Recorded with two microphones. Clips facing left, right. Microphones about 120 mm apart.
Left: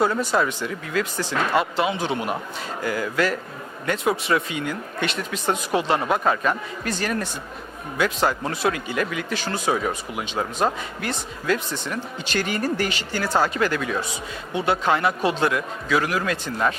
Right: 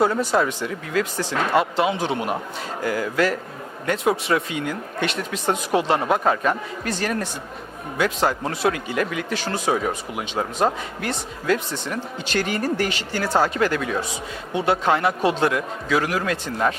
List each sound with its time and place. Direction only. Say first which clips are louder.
0.0 s speech: right 2 dB; 35° right (ahead or behind)
0.4 s a man's voice: right 1 dB; 45° right (ahead or behind)
1.8 s speech: right 2 dB; 55° right (ahead or behind)
2.8 s a man's voice: right 2 dB; 45° right (ahead or behind)
5.5 s speech: right 2 dB; 40° right (ahead or behind)
8.3 s a man's voice: right 1 dB; 40° right (ahead or behind)
9.4 s speech: right 1 dB; 35° right (ahead or behind)
12.2 s a man's voice: right 1 dB; 50° right (ahead or behind)
12.9 s speech: right 1 dB; 60° right (ahead or behind)
13.2 s a man's voice: right 2 dB; 35° right (ahead or behind)